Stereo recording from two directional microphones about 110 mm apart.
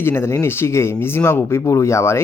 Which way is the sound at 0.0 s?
20° left (ahead or behind).